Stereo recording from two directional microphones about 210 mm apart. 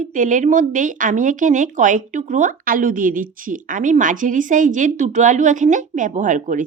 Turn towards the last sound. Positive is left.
turn(degrees=-35)  # may be behind; listen again after turning